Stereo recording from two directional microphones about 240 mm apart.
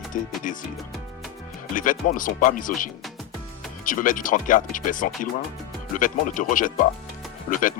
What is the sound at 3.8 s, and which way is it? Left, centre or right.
Speech, left.